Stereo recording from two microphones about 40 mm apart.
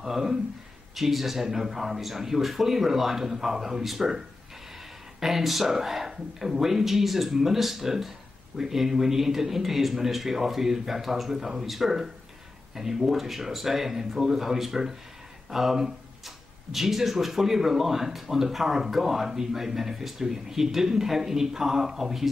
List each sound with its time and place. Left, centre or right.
0.0 s speech: centre
5.2 s speech: centre